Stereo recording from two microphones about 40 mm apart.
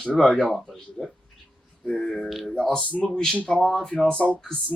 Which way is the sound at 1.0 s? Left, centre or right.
Centre.